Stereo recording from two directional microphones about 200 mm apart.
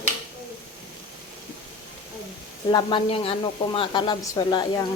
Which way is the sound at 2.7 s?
25° left (ahead or behind).